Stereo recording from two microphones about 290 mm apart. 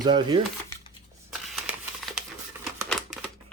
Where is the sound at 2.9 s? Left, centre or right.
Centre.